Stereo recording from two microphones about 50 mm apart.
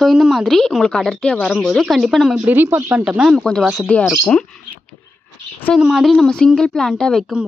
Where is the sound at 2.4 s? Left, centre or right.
Right.